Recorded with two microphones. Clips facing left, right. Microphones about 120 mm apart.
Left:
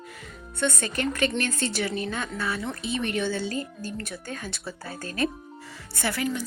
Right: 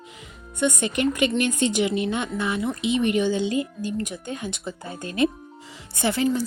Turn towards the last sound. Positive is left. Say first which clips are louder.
# right 6 dB
turn(degrees=-20)  # may be behind; listen again after turning